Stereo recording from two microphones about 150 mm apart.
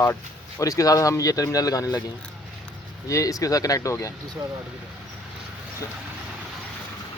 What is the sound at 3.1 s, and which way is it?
Speech, 25° left (ahead or behind).